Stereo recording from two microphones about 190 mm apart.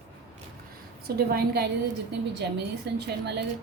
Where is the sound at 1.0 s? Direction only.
55° right (ahead or behind).